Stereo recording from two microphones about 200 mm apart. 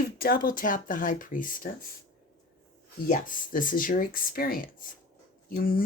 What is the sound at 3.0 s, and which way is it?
Speech, 40° left (ahead or behind).